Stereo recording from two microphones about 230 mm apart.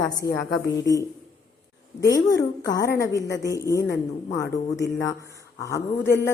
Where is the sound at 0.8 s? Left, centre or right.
Centre.